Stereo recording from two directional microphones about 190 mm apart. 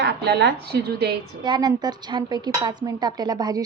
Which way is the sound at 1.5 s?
25° right (ahead or behind).